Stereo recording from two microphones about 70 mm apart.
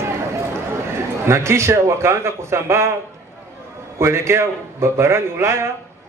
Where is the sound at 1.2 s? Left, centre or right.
Right.